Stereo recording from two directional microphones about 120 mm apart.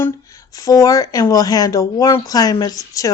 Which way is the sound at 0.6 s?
30° left (ahead or behind).